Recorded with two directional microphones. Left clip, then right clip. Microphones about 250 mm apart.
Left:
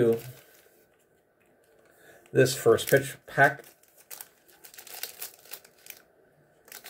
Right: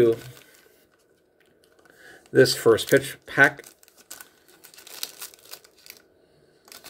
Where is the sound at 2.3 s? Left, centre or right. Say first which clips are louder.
Right 4 dB; right.